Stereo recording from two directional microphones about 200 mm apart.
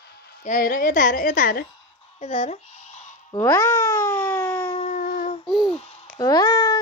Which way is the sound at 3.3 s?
15° left (ahead or behind).